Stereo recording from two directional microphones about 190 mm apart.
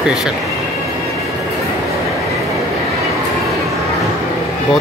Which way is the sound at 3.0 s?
Centre (ahead or behind).